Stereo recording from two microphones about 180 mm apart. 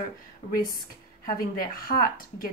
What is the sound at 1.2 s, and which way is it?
Speech, 55° left (ahead or behind).